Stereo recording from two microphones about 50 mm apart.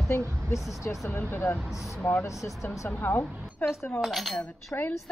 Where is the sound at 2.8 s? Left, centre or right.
Left.